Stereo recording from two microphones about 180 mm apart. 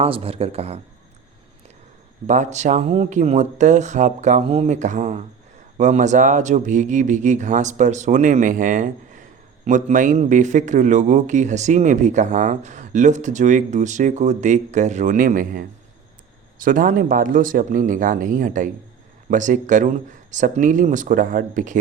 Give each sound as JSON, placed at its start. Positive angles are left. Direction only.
{"t": 0.0, "sound": "speech", "side_deg": -35}
{"t": 2.2, "sound": "a man's voice", "side_deg": -40}